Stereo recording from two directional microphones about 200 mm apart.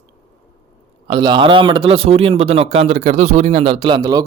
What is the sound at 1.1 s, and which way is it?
Speech, 20° right (ahead or behind).